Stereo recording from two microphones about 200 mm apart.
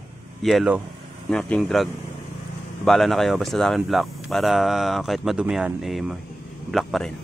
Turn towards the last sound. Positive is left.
turn(degrees=0)  # may be behind; listen again after turning